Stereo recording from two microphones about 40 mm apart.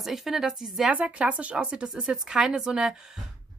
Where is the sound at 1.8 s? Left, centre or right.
Centre.